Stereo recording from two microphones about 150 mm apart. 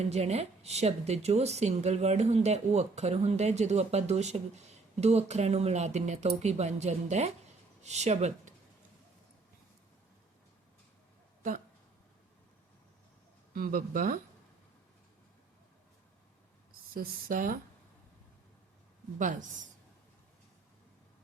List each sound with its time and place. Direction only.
0.0 s speech: 45° right (ahead or behind)
13.5 s speech: 70° right (ahead or behind)
16.9 s speech: 70° right (ahead or behind)
19.2 s a woman's voice: 60° right (ahead or behind)